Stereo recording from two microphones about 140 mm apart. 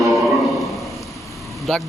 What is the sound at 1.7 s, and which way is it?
Speech, centre (ahead or behind).